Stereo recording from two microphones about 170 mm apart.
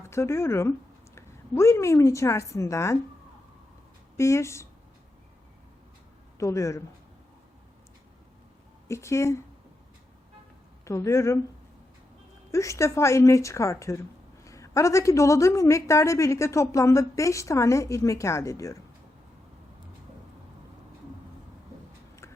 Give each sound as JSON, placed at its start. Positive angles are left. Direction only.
{"t": 0.1, "sound": "a woman's voice", "side_deg": 15}
{"t": 4.2, "sound": "a woman's voice", "side_deg": 15}
{"t": 6.4, "sound": "a woman's voice", "side_deg": 15}
{"t": 8.9, "sound": "a woman's voice", "side_deg": 15}
{"t": 10.8, "sound": "a woman's voice", "side_deg": 15}
{"t": 12.5, "sound": "a woman's voice", "side_deg": 20}